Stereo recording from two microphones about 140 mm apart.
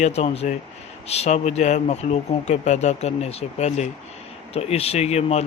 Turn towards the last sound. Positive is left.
turn(degrees=50)  # may be behind; listen again after turning